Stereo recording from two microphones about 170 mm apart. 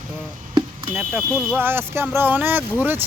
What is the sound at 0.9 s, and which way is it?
Speech, 10° right (ahead or behind).